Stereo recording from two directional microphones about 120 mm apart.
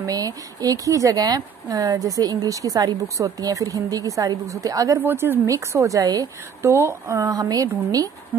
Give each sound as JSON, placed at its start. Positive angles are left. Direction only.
{"t": 0.0, "sound": "speech", "side_deg": -30}
{"t": 5.0, "sound": "a woman's voice", "side_deg": -20}